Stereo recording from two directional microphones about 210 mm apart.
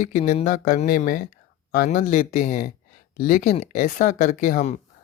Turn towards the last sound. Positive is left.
turn(degrees=35)  # may be behind; listen again after turning